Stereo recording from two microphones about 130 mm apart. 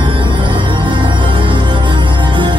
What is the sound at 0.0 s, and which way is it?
Music, 40° right (ahead or behind).